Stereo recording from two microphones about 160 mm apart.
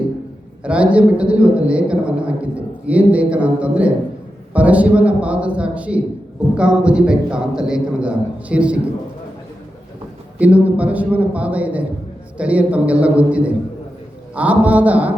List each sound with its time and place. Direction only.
0.6 s a woman's voice: 5° right (ahead or behind)
10.3 s a woman's voice: 10° right (ahead or behind)